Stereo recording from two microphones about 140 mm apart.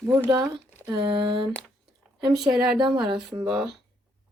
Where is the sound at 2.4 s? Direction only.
5° right (ahead or behind).